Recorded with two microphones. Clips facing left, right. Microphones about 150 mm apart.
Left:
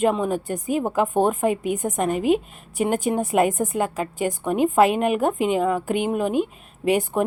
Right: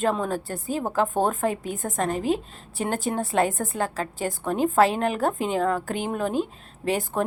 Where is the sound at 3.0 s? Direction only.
15° left (ahead or behind).